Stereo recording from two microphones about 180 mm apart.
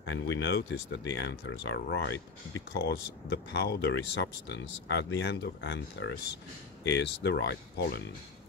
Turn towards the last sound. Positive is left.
turn(degrees=65)  # may be behind; listen again after turning